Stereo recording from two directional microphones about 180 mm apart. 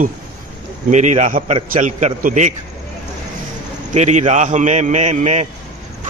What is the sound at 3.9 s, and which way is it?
A man's voice, 40° right (ahead or behind).